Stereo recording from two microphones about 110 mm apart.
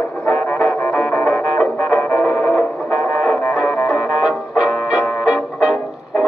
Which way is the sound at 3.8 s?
Centre (ahead or behind).